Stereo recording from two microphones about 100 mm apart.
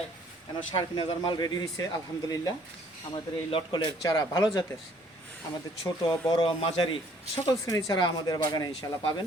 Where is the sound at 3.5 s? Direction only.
60° left (ahead or behind).